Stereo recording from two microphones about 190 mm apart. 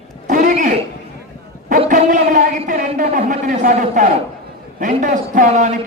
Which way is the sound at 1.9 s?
45° right (ahead or behind).